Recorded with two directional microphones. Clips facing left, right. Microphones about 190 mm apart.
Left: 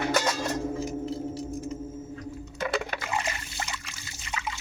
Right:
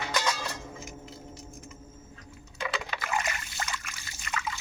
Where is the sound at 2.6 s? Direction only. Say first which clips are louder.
Left 5 dB; 55° left (ahead or behind).